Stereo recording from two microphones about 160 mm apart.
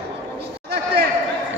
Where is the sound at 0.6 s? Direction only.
85° right.